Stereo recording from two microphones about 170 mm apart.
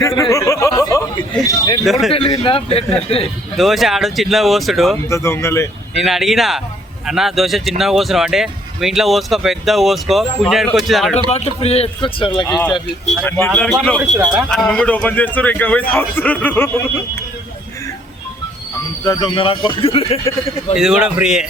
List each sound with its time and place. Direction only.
0.2 s speech: 20° left (ahead or behind)
1.8 s speech: centre (ahead or behind)
2.1 s a man's voice: 30° left (ahead or behind)
3.5 s speech: centre (ahead or behind)
5.0 s speech: 15° left (ahead or behind)
5.9 s speech: centre (ahead or behind)
11.3 s a man's voice: 40° left (ahead or behind)
12.5 s speech: 5° left (ahead or behind)
13.5 s speech: centre (ahead or behind)
19.0 s a man's voice: 25° left (ahead or behind)
20.7 s speech: 5° right (ahead or behind)